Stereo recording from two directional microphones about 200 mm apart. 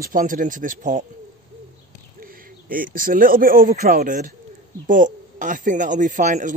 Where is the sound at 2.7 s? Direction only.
45° right (ahead or behind).